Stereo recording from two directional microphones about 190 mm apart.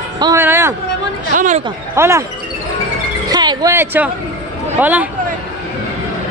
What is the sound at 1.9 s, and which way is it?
Speech, 15° right (ahead or behind).